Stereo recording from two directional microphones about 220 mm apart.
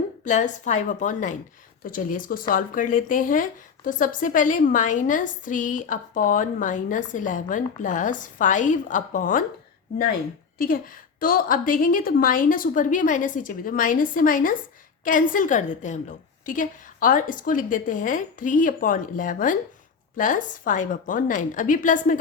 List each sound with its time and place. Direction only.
0.3 s speech: 35° left (ahead or behind)
10.6 s speech: 40° left (ahead or behind)